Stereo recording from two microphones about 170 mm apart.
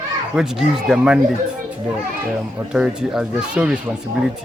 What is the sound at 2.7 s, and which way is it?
Speech, 5° right (ahead or behind).